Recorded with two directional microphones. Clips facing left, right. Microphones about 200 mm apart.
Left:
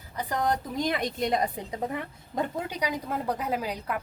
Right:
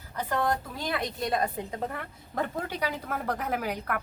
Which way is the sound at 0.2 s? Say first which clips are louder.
Even; 15° left (ahead or behind).